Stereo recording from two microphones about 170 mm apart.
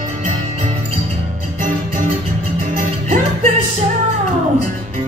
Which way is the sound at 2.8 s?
50° right (ahead or behind).